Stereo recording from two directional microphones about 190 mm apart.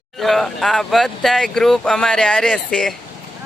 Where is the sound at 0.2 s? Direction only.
Centre (ahead or behind).